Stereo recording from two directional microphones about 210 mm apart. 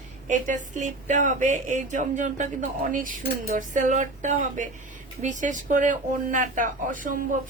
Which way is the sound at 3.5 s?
35° right (ahead or behind).